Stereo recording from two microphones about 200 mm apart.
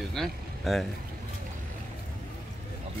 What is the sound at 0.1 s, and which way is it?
Speech, centre (ahead or behind).